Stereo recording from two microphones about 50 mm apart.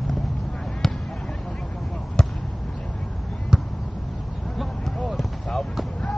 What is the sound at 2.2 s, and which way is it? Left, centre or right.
Basketball bounce, centre.